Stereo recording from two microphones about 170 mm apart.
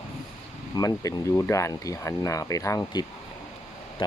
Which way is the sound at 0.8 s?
20° left (ahead or behind).